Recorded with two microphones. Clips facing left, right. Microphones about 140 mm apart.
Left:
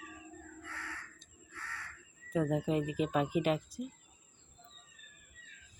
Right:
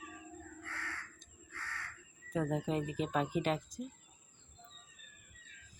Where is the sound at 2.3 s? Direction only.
5° left (ahead or behind).